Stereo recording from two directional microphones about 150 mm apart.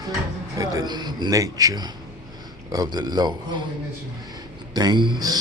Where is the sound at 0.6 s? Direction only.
25° right (ahead or behind).